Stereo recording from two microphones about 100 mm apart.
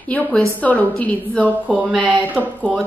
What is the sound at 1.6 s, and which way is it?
A woman's voice, 10° right (ahead or behind).